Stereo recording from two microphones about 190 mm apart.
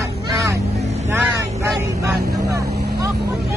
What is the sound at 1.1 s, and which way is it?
Vehicle, 15° right (ahead or behind).